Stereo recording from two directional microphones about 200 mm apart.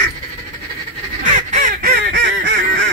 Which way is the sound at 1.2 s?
40° right (ahead or behind).